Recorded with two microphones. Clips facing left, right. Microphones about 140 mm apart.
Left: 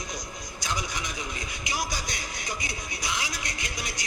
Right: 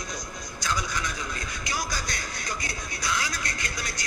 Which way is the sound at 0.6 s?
15° left (ahead or behind).